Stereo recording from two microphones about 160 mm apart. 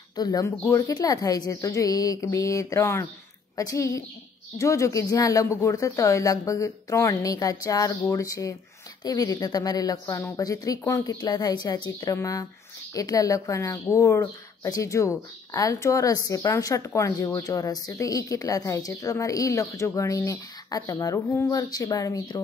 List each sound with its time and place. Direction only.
0.1 s speech: 25° left (ahead or behind)